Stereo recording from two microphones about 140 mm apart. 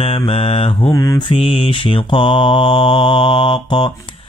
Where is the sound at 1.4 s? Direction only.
40° left (ahead or behind).